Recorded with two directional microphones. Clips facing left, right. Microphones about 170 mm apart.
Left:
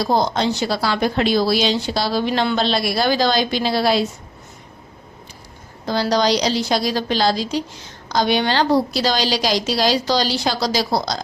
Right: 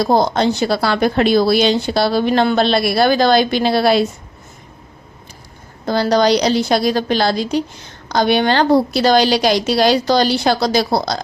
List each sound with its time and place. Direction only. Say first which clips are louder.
0.0 s a woman's voice: right 4 dB; 55° right (ahead or behind)
5.8 s a woman's voice: right 4 dB; 55° right (ahead or behind)